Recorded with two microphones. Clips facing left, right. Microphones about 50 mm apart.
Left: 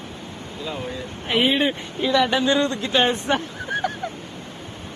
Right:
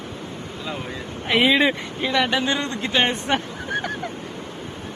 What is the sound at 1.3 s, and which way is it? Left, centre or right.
Speech, right.